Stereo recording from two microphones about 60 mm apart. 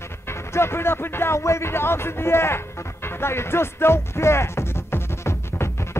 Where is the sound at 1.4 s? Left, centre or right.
Left.